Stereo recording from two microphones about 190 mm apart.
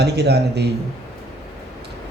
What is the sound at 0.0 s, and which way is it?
Speech, 60° right (ahead or behind).